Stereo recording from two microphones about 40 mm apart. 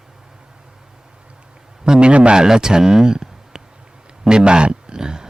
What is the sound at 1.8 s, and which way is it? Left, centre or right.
Speech, right.